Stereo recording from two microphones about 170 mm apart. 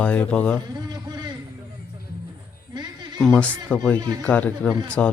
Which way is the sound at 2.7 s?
25° right (ahead or behind).